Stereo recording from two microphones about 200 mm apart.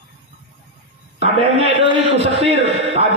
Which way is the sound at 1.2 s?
30° right (ahead or behind).